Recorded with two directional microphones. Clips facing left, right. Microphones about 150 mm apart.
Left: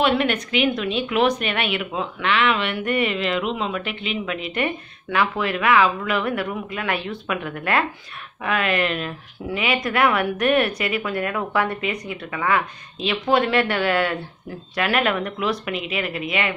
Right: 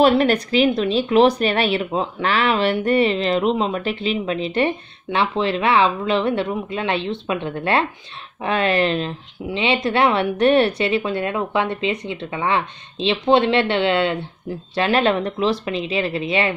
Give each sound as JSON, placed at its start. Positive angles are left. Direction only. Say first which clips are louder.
{"t": 0.0, "sound": "a woman's voice", "louder": "right 5 dB", "side_deg": -35}